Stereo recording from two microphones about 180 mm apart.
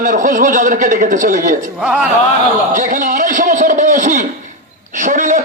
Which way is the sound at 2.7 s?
45° right (ahead or behind).